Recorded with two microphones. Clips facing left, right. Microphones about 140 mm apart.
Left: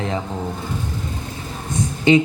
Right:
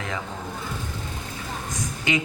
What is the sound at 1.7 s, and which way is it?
Speech, 30° left (ahead or behind).